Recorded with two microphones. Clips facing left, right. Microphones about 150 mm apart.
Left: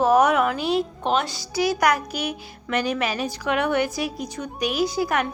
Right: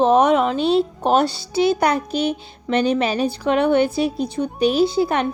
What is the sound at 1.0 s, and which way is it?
A woman's voice, 40° right (ahead or behind).